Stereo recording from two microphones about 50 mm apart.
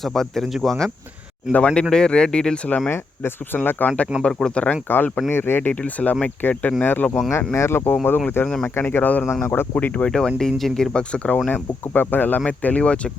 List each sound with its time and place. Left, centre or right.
0.0 s speech: centre
1.5 s speech: centre
2.9 s speech: left
4.2 s speech: centre
4.5 s speech: left
4.9 s speech: left
5.8 s speech: left
6.8 s speech: left
7.5 s speech: left
9.7 s speech: left
10.1 s speech: centre
11.1 s speech: left
11.4 s speech: left